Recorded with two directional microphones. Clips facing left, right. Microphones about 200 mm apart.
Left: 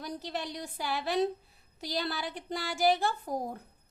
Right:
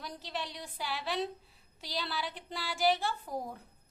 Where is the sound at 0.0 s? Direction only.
45° left (ahead or behind).